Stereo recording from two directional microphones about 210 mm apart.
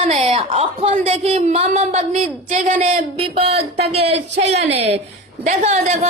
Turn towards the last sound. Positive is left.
turn(degrees=-30)  # may be behind; listen again after turning